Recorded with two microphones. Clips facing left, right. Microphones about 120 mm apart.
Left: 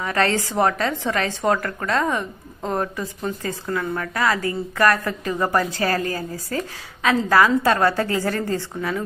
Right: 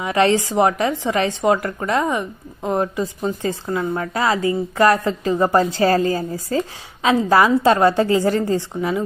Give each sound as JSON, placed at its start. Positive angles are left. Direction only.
{"t": 0.0, "sound": "a woman's voice", "side_deg": -15}